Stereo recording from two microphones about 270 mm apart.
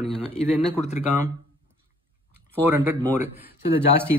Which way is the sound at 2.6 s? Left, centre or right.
Centre.